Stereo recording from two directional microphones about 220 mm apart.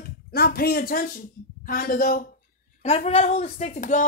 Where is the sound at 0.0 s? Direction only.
45° left (ahead or behind).